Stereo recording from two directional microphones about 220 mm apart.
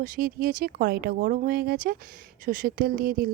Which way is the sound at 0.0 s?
40° right (ahead or behind).